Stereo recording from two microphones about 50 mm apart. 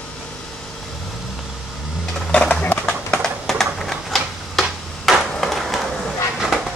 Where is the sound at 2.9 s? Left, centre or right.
Centre.